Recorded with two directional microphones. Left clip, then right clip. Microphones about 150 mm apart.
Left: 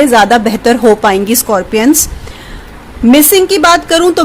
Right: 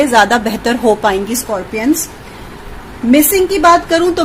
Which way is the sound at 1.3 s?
70° left (ahead or behind).